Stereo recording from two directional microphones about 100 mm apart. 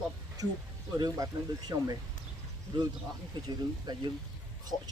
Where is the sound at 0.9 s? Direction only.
40° right (ahead or behind).